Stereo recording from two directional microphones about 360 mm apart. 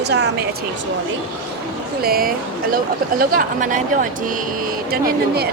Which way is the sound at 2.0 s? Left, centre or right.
Right.